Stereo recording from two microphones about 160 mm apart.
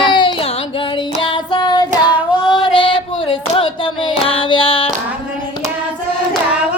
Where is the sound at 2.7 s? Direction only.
30° left (ahead or behind).